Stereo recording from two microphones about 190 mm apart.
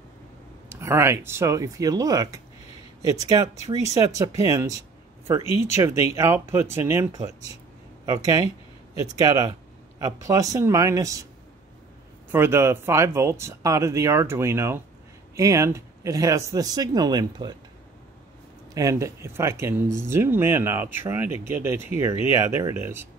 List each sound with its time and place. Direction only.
0.7 s speech: 15° right (ahead or behind)
5.8 s speech: 15° right (ahead or behind)
12.3 s speech: 10° right (ahead or behind)
18.8 s speech: 15° right (ahead or behind)